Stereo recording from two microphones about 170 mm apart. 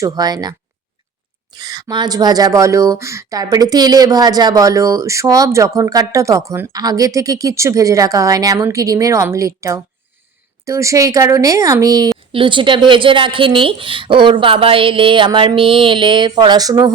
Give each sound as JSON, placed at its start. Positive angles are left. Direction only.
{"t": 0.0, "sound": "speech", "side_deg": -20}
{"t": 1.5, "sound": "speech", "side_deg": -25}